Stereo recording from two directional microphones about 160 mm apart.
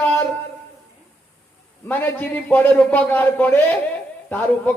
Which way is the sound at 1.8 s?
10° left (ahead or behind).